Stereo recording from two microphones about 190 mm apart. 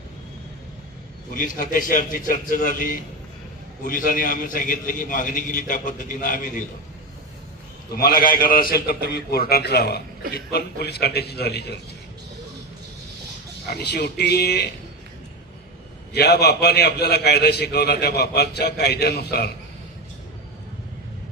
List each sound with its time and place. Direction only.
1.3 s a man's voice: 45° left (ahead or behind)
7.9 s a man's voice: 50° left (ahead or behind)
13.7 s a man's voice: 60° left (ahead or behind)
16.1 s a man's voice: 60° left (ahead or behind)